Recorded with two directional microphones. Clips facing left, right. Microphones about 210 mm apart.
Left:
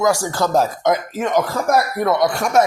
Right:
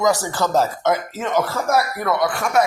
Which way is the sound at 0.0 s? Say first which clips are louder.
Left 1 dB; 10° left (ahead or behind).